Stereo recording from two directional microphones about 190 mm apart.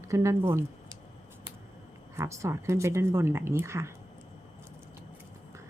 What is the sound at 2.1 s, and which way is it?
Speech, 15° right (ahead or behind).